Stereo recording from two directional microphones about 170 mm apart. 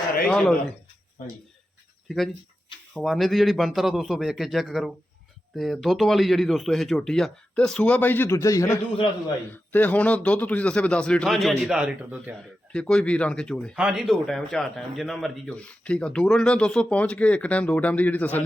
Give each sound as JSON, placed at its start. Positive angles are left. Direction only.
{"t": 0.3, "sound": "a man's voice", "side_deg": 5}
{"t": 1.2, "sound": "speech", "side_deg": 50}
{"t": 2.0, "sound": "a man's voice", "side_deg": 0}
{"t": 12.7, "sound": "a man's voice", "side_deg": 5}